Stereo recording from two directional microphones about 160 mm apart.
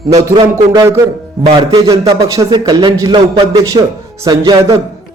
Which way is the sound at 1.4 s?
25° right (ahead or behind).